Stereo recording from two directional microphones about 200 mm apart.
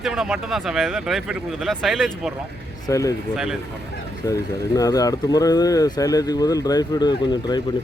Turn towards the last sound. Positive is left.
turn(degrees=20)  # may be behind; listen again after turning